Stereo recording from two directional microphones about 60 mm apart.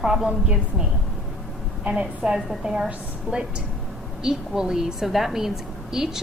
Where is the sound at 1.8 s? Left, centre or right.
Centre.